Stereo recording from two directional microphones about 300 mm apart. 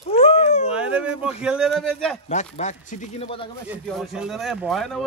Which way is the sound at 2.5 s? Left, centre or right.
Left.